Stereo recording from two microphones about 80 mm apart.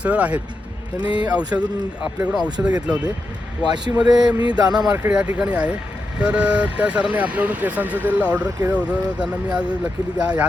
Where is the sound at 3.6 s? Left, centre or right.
Right.